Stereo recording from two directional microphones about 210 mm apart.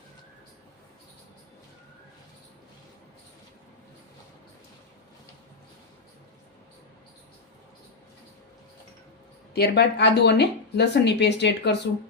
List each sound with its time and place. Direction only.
9.5 s a woman's voice: 50° left (ahead or behind)